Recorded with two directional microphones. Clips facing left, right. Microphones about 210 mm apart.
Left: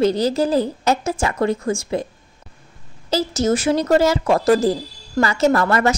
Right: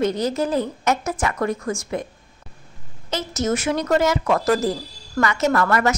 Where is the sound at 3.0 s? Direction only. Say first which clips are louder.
Left 5 dB; 30° left (ahead or behind).